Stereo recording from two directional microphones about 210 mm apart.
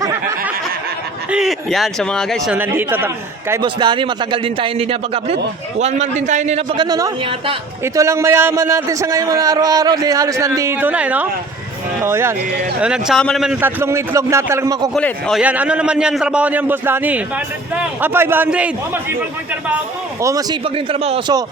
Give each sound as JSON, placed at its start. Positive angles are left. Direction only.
{"t": 0.0, "sound": "a sound", "side_deg": -10}
{"t": 1.3, "sound": "speech", "side_deg": 0}
{"t": 2.6, "sound": "a man's voice", "side_deg": -10}
{"t": 3.5, "sound": "a man's voice", "side_deg": -20}
{"t": 6.8, "sound": "a man's voice", "side_deg": -20}
{"t": 14.9, "sound": "a man's voice", "side_deg": 0}
{"t": 20.2, "sound": "a man's voice", "side_deg": -20}